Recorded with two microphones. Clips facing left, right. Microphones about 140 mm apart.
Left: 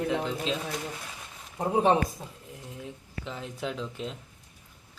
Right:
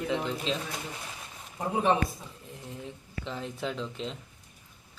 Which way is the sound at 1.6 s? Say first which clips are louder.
Left 4 dB; 35° left (ahead or behind).